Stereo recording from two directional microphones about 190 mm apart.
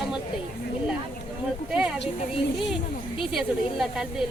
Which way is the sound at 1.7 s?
5° right (ahead or behind).